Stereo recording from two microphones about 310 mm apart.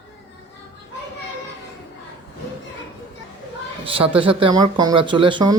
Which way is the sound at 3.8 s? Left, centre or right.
Centre.